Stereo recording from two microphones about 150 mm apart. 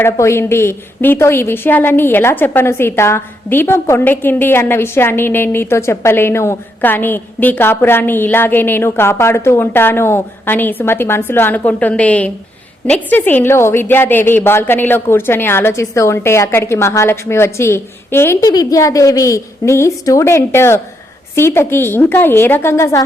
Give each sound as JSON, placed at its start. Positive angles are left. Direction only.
{"t": 0.0, "sound": "a woman's voice", "side_deg": 15}